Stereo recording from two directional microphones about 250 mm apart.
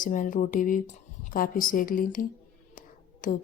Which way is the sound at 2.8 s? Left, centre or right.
Left.